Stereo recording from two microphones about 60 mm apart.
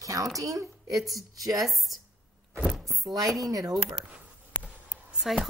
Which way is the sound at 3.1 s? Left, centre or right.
Right.